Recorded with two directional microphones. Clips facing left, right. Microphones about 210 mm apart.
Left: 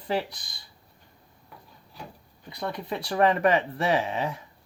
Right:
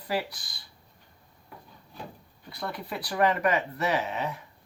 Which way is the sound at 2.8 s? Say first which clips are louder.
Left 3 dB; 25° left (ahead or behind).